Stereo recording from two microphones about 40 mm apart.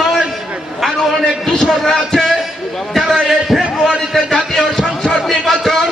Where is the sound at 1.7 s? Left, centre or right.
Centre.